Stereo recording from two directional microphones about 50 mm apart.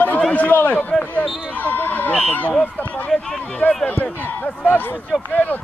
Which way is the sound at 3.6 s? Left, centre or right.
Left.